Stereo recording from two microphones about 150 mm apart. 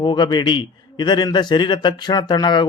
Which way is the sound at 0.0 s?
30° left (ahead or behind).